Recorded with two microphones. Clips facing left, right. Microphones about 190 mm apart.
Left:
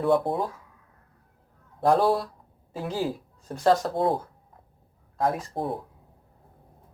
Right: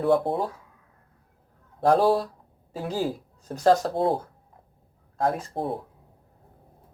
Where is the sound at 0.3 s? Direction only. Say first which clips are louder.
Right 1 dB; 30° right (ahead or behind).